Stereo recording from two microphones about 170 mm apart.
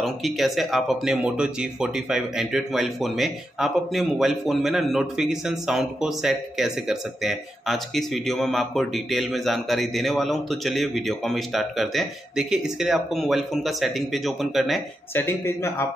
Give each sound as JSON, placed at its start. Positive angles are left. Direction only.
{"t": 0.0, "sound": "speech", "side_deg": 0}
{"t": 15.1, "sound": "speech", "side_deg": 15}